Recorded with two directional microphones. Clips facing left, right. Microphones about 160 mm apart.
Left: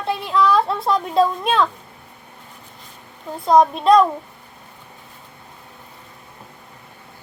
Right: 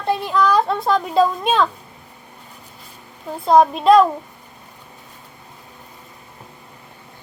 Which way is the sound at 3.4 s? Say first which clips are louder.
Right 1 dB; 5° right (ahead or behind).